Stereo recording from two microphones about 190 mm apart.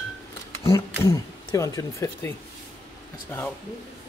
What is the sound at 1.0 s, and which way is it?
A man's voice, 15° left (ahead or behind).